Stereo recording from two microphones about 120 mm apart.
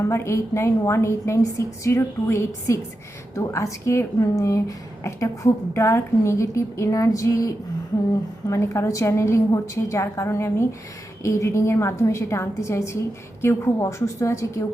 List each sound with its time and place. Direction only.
0.0 s a woman's voice: 25° left (ahead or behind)